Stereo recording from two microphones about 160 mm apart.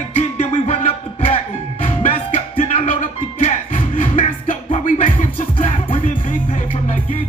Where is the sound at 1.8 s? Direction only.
40° left (ahead or behind).